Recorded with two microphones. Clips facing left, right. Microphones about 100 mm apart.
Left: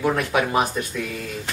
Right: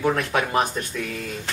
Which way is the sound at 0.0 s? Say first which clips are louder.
Left 1 dB; 5° left (ahead or behind).